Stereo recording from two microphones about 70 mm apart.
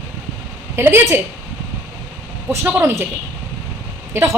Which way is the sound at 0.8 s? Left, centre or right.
Right.